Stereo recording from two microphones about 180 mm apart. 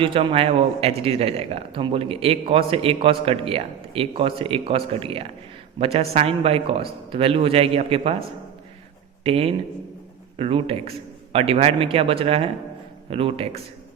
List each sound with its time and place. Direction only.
0.0 s a man's voice: 30° right (ahead or behind)
9.2 s a man's voice: 30° right (ahead or behind)